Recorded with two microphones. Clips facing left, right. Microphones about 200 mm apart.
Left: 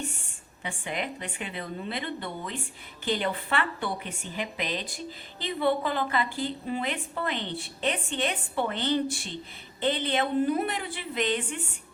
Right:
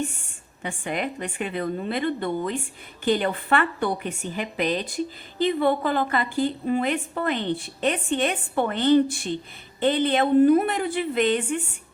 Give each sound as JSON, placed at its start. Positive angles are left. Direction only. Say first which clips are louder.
{"t": 0.6, "sound": "a woman's voice", "louder": "right 5 dB", "side_deg": -50}